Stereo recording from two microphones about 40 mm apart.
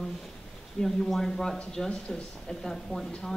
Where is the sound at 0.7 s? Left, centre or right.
Centre.